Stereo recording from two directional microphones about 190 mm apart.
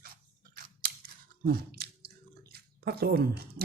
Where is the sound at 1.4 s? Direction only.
55° right (ahead or behind).